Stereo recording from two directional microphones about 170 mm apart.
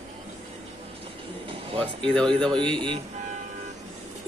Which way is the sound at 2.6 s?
30° right (ahead or behind).